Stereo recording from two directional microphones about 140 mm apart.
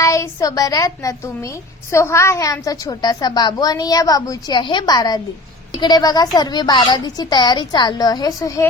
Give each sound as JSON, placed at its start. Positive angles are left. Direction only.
{"t": 0.0, "sound": "a woman's voice", "side_deg": 25}